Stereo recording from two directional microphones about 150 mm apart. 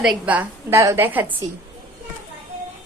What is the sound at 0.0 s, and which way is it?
A woman's voice, 5° right (ahead or behind).